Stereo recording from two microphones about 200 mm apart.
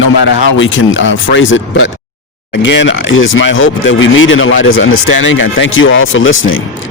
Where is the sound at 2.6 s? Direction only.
65° left (ahead or behind).